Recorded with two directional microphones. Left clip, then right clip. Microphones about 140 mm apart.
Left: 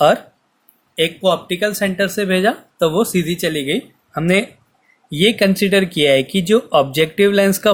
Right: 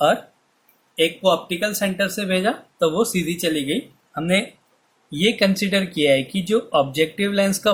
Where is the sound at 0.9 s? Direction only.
55° left (ahead or behind); by 4.4 s 75° left (ahead or behind).